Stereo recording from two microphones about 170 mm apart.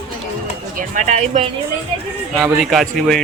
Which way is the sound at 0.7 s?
50° right (ahead or behind).